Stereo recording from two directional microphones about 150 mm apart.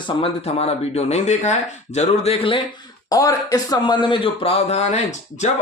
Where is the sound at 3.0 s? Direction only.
25° left (ahead or behind).